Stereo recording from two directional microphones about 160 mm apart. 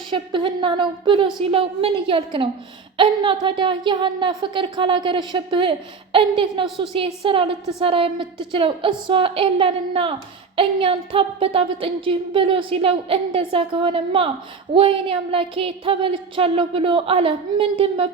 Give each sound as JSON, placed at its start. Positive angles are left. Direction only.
{"t": 0.1, "sound": "a woman's voice", "side_deg": -30}